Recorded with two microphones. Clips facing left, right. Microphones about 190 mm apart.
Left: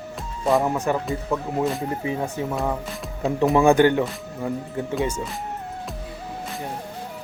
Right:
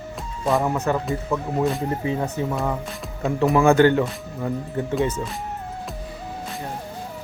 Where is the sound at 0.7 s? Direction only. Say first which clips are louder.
Right 1 dB; 10° left (ahead or behind).